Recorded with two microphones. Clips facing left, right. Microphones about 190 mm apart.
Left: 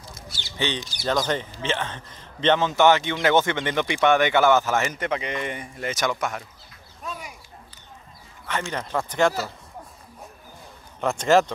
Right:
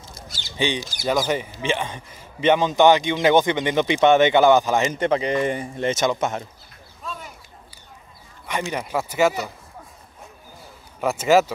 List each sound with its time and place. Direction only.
0.6 s speech: 10° right (ahead or behind)
4.9 s a man's voice: 30° right (ahead or behind)
7.0 s a sound: 10° left (ahead or behind)
8.5 s speech: 15° right (ahead or behind)
11.0 s a man's voice: 5° right (ahead or behind)